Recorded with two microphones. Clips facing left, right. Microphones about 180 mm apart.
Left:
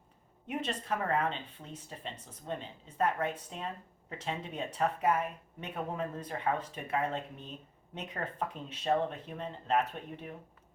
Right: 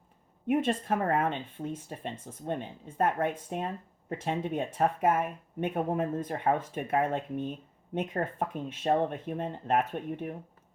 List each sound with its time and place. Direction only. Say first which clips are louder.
0.4 s speech: right 9 dB; 50° right (ahead or behind)